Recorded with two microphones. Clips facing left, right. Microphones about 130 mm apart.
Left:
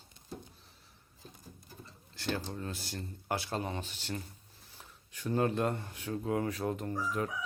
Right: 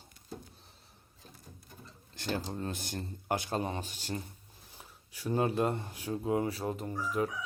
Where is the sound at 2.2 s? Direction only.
40° right (ahead or behind).